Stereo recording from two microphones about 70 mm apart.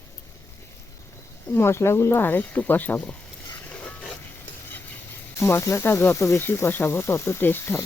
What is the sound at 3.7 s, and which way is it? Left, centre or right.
Train, centre.